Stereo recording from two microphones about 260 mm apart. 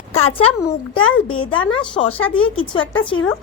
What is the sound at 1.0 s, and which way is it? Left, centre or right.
Speech, left.